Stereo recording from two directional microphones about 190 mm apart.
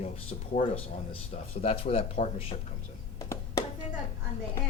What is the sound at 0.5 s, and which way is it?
A woman's voice, 35° left (ahead or behind).